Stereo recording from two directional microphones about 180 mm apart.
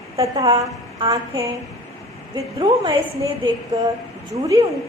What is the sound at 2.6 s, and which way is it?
Speech, 25° right (ahead or behind).